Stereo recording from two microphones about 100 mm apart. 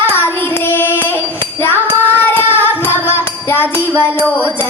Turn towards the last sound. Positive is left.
turn(degrees=20)  # may be behind; listen again after turning